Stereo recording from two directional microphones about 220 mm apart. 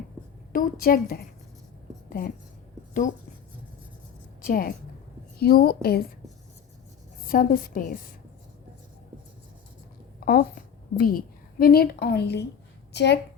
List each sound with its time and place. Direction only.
0.5 s a woman's voice: 40° left (ahead or behind)
4.4 s a woman's voice: 40° left (ahead or behind)
7.3 s a woman's voice: 40° left (ahead or behind)
10.2 s a sound: 45° left (ahead or behind)
10.9 s a woman's voice: 40° left (ahead or behind)